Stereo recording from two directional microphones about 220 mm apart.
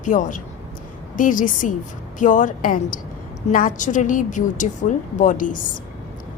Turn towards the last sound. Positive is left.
turn(degrees=35)  # may be behind; listen again after turning